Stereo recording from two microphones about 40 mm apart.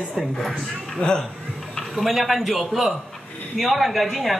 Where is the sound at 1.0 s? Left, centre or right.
Centre.